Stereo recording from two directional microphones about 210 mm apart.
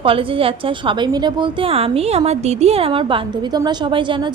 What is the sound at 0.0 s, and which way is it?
A woman's voice, 25° right (ahead or behind).